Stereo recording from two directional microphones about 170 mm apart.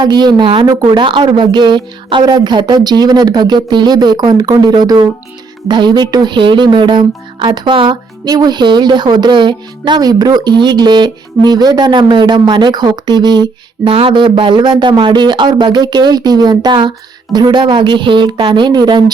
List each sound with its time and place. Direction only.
0.0 s music: 25° right (ahead or behind)